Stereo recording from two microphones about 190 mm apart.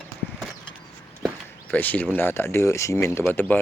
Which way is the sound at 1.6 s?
10° left (ahead or behind).